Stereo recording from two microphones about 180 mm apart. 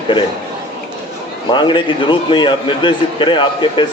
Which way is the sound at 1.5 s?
25° left (ahead or behind).